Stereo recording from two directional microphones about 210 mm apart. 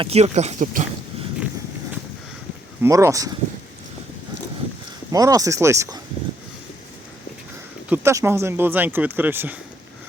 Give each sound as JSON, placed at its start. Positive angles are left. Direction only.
{"t": 0.0, "sound": "speech", "side_deg": -30}
{"t": 2.8, "sound": "speech", "side_deg": -15}
{"t": 5.1, "sound": "speech", "side_deg": -15}
{"t": 7.9, "sound": "speech", "side_deg": -10}